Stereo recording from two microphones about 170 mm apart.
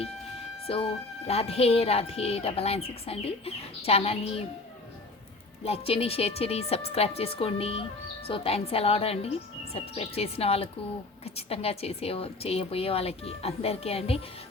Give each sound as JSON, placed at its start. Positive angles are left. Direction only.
{"t": 0.7, "sound": "a woman's voice", "side_deg": 35}
{"t": 5.6, "sound": "a woman's voice", "side_deg": 35}